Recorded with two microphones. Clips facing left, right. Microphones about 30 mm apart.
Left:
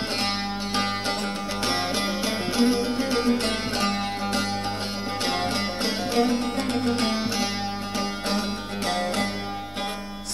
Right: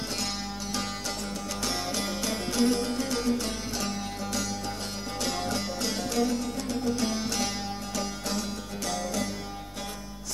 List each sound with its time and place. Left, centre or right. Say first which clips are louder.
1.7 s music: left 6 dB; left
8.8 s music: left 6 dB; left